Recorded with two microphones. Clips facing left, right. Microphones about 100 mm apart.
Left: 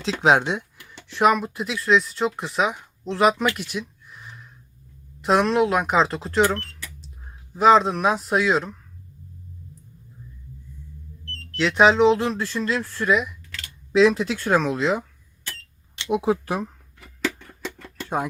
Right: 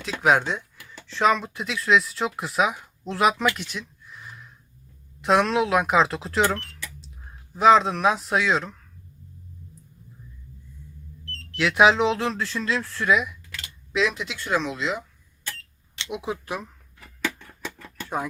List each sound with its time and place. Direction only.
0.0 s speech: 25° left (ahead or behind); by 3.4 s centre (ahead or behind)
3.7 s a sound: 5° left (ahead or behind)
5.2 s speech: centre (ahead or behind)
11.5 s speech: 5° right (ahead or behind)
13.9 s speech: 35° left (ahead or behind)
16.0 s speech: 35° left (ahead or behind)